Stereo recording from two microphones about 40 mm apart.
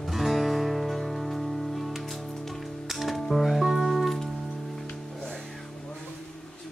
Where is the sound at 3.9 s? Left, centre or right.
Centre.